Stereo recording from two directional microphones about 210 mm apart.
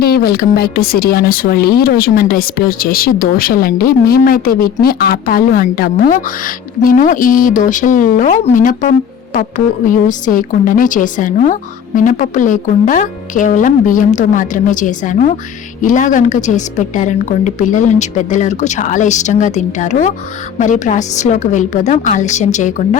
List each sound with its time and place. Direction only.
0.0 s a woman's voice: 45° left (ahead or behind)